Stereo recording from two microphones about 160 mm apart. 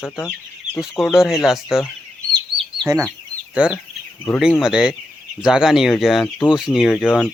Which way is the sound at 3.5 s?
5° right (ahead or behind).